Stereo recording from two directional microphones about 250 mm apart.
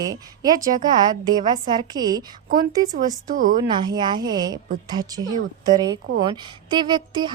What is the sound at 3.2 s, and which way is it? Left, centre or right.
Speech, right.